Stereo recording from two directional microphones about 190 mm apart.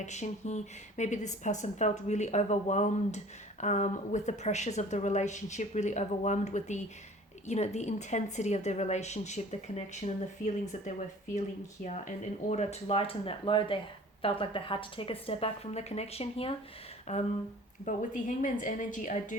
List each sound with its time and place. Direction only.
0.0 s a woman's voice: 40° left (ahead or behind)